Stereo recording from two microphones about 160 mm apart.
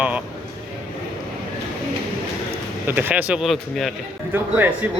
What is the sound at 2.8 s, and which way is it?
Speech, 10° right (ahead or behind).